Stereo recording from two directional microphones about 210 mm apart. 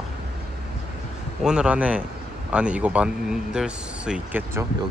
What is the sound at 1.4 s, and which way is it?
Speech, 5° right (ahead or behind).